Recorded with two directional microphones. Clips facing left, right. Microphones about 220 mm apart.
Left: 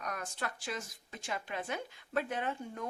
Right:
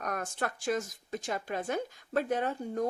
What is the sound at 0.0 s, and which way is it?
Speech, 50° right (ahead or behind).